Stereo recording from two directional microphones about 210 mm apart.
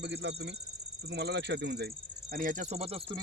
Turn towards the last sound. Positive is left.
turn(degrees=-30)  # may be behind; listen again after turning